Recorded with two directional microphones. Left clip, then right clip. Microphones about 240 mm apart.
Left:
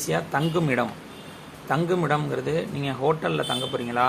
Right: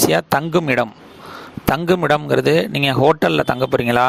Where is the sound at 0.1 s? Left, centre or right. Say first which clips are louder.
Right 8 dB; right.